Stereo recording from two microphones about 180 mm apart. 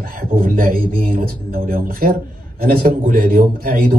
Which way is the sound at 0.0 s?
50° right (ahead or behind).